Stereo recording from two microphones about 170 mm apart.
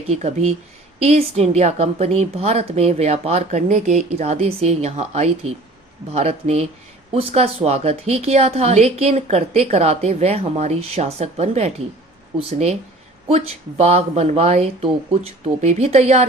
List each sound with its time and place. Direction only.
0.1 s a woman's voice: 40° right (ahead or behind)